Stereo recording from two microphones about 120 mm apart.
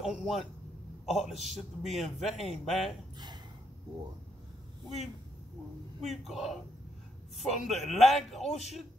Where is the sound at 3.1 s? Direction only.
35° right (ahead or behind).